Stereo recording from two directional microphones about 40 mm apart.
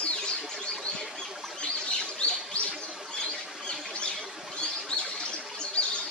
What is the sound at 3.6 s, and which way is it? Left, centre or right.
Squawk, left.